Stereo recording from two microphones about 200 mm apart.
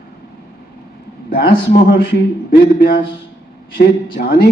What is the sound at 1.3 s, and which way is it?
Speech, 50° left (ahead or behind).